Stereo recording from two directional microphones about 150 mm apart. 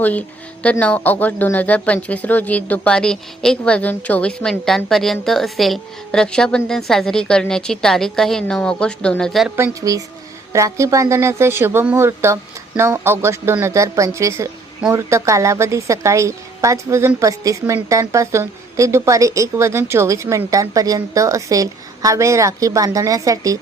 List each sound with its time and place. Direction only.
0.0 s speech: 10° left (ahead or behind)
9.6 s speech: 20° right (ahead or behind)